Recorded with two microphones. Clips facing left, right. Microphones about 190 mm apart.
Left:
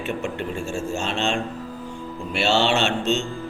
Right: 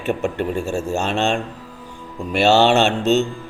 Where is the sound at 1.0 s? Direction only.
60° right (ahead or behind).